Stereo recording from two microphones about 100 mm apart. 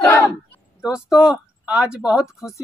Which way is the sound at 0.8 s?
5° right (ahead or behind).